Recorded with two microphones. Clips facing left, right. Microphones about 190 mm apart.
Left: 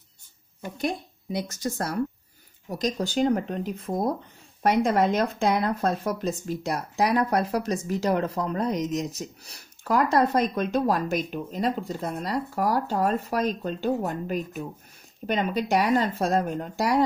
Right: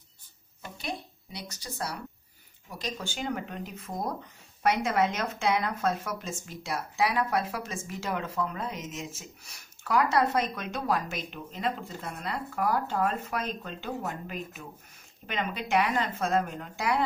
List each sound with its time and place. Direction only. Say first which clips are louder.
0.7 s speech: left 8 dB; 50° left (ahead or behind)